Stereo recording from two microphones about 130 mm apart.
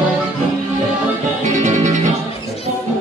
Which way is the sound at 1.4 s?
65° right (ahead or behind).